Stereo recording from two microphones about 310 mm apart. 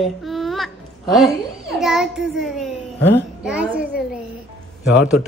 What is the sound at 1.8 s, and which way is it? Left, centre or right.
A child's voice, centre.